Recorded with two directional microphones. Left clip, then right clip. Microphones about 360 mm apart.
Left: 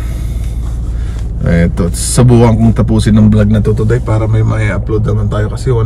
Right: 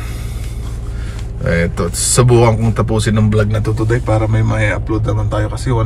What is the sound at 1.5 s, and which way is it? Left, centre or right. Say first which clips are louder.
Speech: left 2 dB; centre.